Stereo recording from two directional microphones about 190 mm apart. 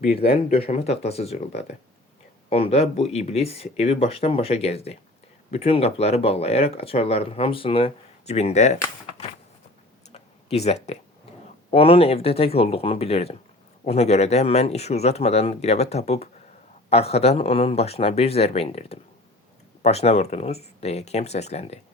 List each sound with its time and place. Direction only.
0.6 s speech: 35° left (ahead or behind)
2.5 s speech: 30° left (ahead or behind)
10.1 s a sound: 35° left (ahead or behind)
11.7 s speech: 30° left (ahead or behind)